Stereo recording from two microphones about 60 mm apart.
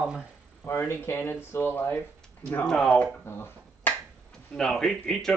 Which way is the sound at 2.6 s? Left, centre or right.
Centre.